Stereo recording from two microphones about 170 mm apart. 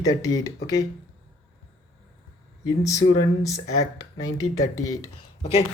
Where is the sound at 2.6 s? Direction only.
20° left (ahead or behind).